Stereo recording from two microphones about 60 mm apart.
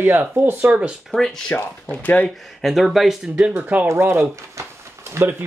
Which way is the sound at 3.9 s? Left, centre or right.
Right.